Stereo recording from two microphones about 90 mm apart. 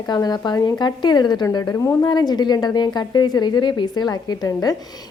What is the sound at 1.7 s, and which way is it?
Speech, 30° left (ahead or behind).